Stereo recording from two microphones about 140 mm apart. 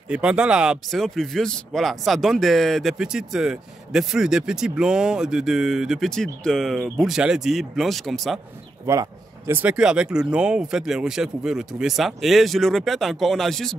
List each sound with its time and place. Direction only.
0.1 s a man's voice: 10° right (ahead or behind)
8.9 s a man's voice: 20° right (ahead or behind); by 13.7 s 5° left (ahead or behind)